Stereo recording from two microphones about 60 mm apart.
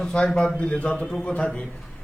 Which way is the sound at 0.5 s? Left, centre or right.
Centre.